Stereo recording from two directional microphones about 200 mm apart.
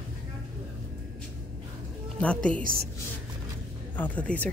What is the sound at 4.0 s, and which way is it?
Speech, 5° left (ahead or behind).